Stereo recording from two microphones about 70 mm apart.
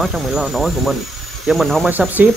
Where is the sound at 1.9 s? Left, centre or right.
Right.